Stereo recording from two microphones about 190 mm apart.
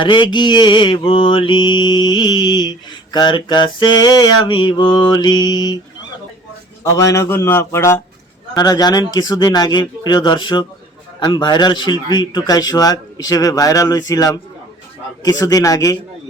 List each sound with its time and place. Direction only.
0.0 s mantra: 25° left (ahead or behind)
6.9 s a man's voice: 15° left (ahead or behind)
8.5 s mantra: 20° left (ahead or behind)